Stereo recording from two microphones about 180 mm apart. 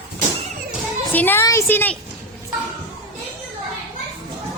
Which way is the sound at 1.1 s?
10° left (ahead or behind).